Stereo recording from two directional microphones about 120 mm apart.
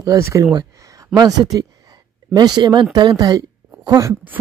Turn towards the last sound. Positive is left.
turn(degrees=-30)  # may be behind; listen again after turning